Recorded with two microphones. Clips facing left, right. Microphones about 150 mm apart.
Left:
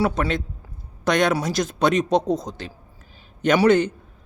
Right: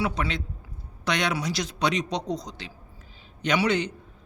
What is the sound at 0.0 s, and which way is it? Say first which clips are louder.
A woman's voice: left 6 dB; 50° left (ahead or behind).